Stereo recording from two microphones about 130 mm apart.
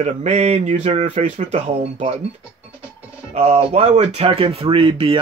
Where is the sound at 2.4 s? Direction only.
10° right (ahead or behind).